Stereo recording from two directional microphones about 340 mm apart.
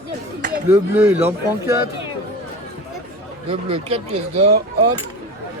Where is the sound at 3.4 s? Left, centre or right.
Centre.